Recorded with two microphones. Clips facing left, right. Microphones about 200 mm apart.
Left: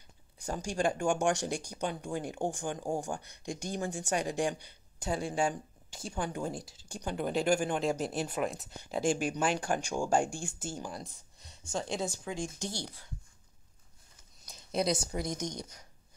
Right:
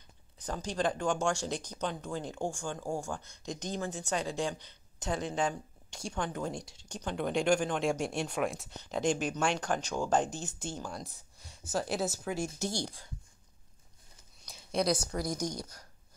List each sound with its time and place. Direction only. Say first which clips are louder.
0.4 s speech: left 1 dB; 10° left (ahead or behind); by 13.0 s 10° right (ahead or behind)
14.4 s a sound: even; centre (ahead or behind)
15.0 s a woman's voice: right 1 dB; 25° left (ahead or behind)